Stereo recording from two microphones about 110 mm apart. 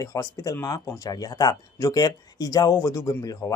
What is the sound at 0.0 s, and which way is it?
Speech, 30° left (ahead or behind).